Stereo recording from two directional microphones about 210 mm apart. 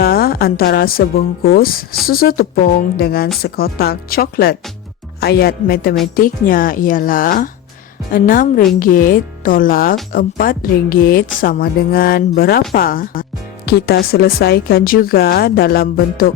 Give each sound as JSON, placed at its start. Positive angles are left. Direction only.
{"t": 0.0, "sound": "a woman's voice", "side_deg": 45}